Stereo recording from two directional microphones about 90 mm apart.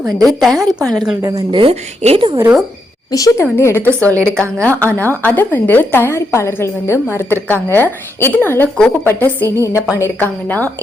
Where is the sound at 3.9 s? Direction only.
30° right (ahead or behind).